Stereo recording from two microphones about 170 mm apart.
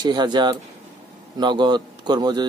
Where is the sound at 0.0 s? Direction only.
25° right (ahead or behind).